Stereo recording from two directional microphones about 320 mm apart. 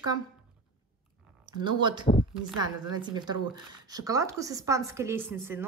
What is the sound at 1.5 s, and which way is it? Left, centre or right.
Speech, centre.